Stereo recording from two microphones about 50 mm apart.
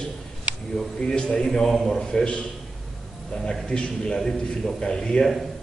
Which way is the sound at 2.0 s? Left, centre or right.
Centre.